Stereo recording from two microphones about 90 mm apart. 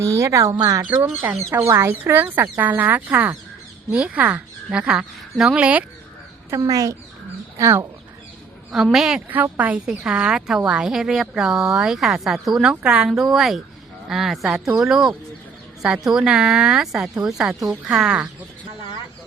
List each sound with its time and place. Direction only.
0.2 s speech: 35° right (ahead or behind)
0.9 s speech: 25° right (ahead or behind)
6.5 s speech: 40° right (ahead or behind)
7.6 s speech: 30° right (ahead or behind)
8.7 s speech: 5° right (ahead or behind)
9.3 s speech: 20° right (ahead or behind)
13.1 s speech: centre (ahead or behind)